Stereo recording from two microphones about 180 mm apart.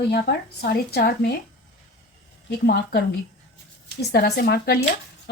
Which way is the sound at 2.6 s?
65° left (ahead or behind).